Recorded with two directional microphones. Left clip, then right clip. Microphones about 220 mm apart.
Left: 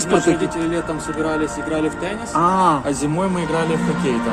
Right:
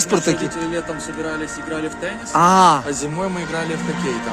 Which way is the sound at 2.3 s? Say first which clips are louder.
Right 4 dB; 50° right (ahead or behind).